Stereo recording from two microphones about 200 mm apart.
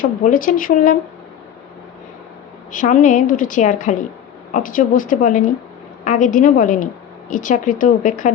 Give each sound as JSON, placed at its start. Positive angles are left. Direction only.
{"t": 0.0, "sound": "speech", "side_deg": 40}
{"t": 2.7, "sound": "a woman's voice", "side_deg": 40}